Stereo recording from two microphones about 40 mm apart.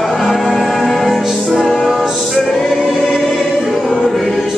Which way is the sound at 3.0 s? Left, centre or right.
Centre.